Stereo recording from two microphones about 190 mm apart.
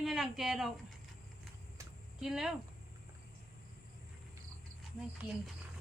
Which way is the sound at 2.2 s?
Centre (ahead or behind).